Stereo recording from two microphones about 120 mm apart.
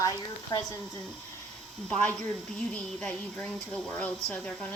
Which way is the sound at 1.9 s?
10° left (ahead or behind).